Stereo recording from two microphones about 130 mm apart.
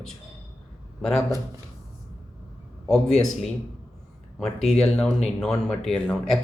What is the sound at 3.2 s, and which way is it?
Speech, centre (ahead or behind).